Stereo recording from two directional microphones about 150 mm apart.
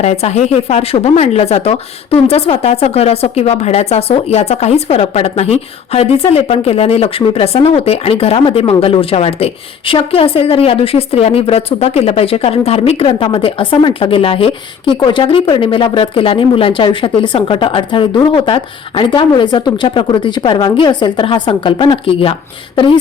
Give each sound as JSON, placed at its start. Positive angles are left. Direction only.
{"t": 0.0, "sound": "speech", "side_deg": 45}